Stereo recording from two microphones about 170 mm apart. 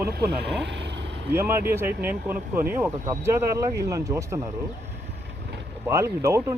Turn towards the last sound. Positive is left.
turn(degrees=-15)  # may be behind; listen again after turning